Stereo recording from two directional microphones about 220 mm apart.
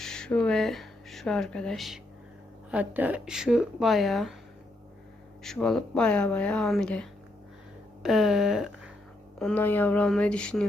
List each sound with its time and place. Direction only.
0.0 s speech: 5° left (ahead or behind)
5.4 s speech: centre (ahead or behind)